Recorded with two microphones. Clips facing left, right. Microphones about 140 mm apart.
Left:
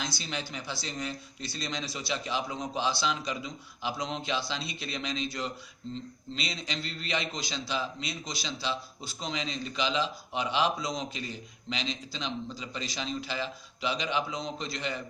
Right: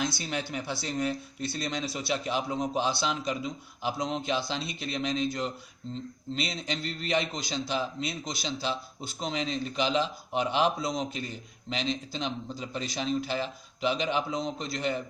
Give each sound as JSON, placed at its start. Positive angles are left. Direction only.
{"t": 0.0, "sound": "a man's voice", "side_deg": -55}